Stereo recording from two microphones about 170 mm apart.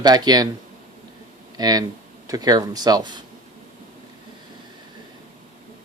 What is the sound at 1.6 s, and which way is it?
Speech, 25° right (ahead or behind).